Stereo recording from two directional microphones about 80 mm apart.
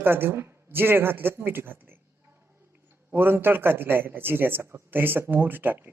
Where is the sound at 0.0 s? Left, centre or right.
Right.